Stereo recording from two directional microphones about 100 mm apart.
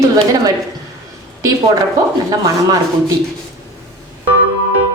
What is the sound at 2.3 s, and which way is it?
Speech, 35° right (ahead or behind).